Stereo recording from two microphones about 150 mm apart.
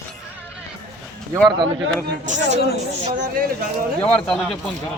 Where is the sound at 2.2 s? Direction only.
55° right (ahead or behind).